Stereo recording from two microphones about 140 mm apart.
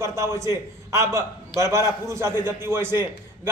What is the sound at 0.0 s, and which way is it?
Speech, 20° right (ahead or behind).